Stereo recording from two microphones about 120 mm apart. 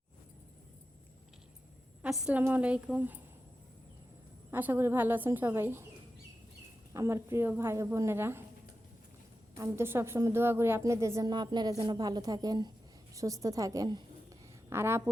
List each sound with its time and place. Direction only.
2.0 s a woman's voice: 5° right (ahead or behind)
4.5 s a woman's voice: 15° right (ahead or behind)
6.9 s a woman's voice: 25° right (ahead or behind)
9.6 s a woman's voice: 20° right (ahead or behind)
14.7 s a woman's voice: 20° right (ahead or behind)